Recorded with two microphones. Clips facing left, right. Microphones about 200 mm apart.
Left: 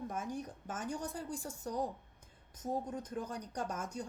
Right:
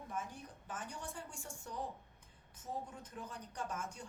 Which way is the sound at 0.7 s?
40° left (ahead or behind).